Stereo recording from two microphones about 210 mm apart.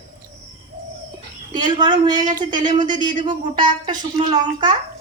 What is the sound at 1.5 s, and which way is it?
Speech, 20° right (ahead or behind).